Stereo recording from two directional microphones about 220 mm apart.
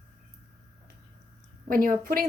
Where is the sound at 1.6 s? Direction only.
40° right (ahead or behind).